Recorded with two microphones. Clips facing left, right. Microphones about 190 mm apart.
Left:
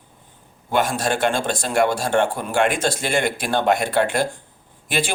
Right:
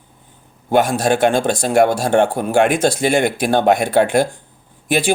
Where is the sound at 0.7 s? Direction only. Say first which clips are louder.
Right 6 dB; 45° right (ahead or behind).